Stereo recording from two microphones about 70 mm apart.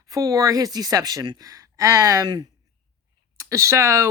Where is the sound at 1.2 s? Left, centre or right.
Right.